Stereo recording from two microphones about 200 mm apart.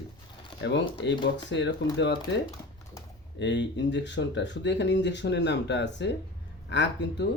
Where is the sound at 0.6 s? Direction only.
65° left (ahead or behind).